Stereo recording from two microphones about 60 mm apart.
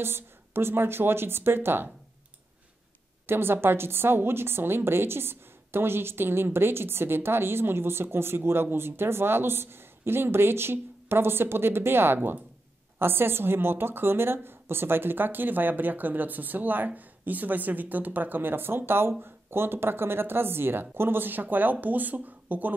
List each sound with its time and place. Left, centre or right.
0.0 s a woman's voice: right
3.3 s a woman's voice: right